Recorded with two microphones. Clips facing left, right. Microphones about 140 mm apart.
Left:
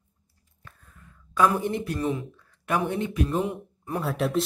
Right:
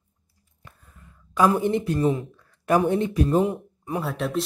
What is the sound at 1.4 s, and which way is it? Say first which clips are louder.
Speech: right 3 dB; 30° right (ahead or behind).